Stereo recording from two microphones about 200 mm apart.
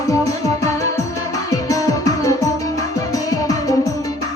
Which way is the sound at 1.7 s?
15° left (ahead or behind).